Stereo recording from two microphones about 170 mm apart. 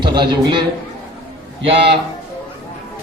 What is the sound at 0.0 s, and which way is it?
Speech, 25° right (ahead or behind).